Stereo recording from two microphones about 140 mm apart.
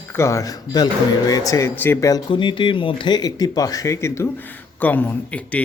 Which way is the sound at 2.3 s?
35° left (ahead or behind).